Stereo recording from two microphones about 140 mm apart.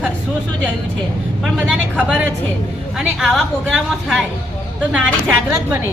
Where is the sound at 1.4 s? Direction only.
5° right (ahead or behind).